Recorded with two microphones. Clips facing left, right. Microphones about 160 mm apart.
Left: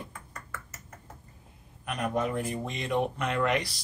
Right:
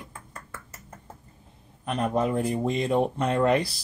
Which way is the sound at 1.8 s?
30° right (ahead or behind).